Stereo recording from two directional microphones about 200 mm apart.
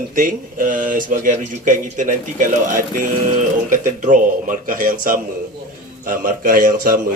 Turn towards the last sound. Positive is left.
turn(degrees=-45)  # may be behind; listen again after turning